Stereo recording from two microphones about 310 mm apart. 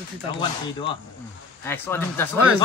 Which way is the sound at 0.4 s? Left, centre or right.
Centre.